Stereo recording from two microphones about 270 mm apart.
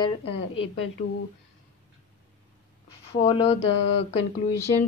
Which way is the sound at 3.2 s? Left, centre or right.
Left.